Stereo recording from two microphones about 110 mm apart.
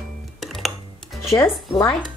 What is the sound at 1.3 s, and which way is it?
Speech, 25° left (ahead or behind).